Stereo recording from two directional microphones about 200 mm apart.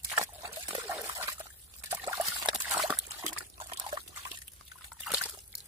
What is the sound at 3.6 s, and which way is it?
Dog, 25° right (ahead or behind).